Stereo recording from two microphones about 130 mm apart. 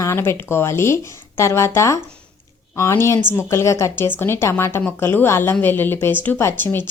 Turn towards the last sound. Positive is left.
turn(degrees=15)  # may be behind; listen again after turning